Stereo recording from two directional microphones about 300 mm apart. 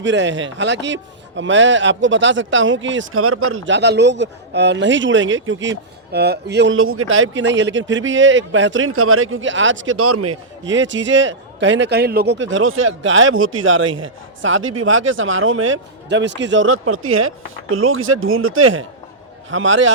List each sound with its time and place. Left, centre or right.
0.0 s speech: right